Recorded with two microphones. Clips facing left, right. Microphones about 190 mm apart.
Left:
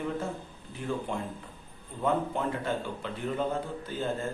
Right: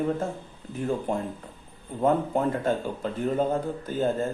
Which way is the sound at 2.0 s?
45° right (ahead or behind).